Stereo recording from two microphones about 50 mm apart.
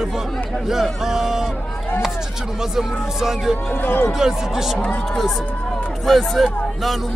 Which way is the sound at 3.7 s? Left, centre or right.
Left.